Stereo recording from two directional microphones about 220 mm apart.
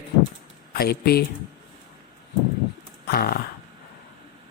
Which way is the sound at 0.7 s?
45° left (ahead or behind).